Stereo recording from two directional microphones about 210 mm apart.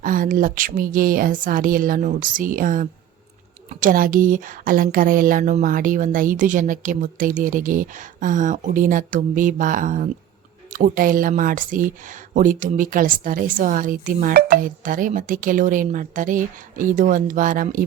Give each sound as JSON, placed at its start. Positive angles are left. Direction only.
{"t": 0.0, "sound": "speech", "side_deg": -40}